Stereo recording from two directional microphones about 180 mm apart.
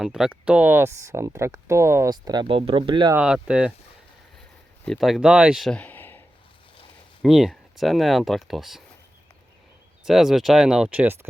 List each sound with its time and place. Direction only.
0.0 s speech: 5° right (ahead or behind); by 3.2 s 25° right (ahead or behind)
3.2 s speech: 5° right (ahead or behind)
4.9 s speech: centre (ahead or behind)
7.2 s speech: centre (ahead or behind)
10.0 s speech: centre (ahead or behind)